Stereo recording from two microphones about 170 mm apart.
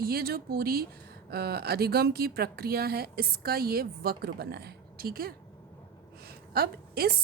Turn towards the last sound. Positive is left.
turn(degrees=-60)  # may be behind; listen again after turning